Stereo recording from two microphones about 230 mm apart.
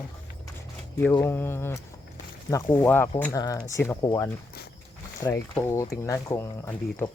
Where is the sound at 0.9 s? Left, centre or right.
Centre.